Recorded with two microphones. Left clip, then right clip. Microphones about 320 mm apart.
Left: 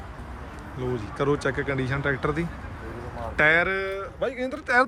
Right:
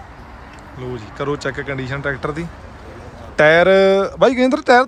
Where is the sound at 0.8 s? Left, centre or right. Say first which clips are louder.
Right 2 dB; centre.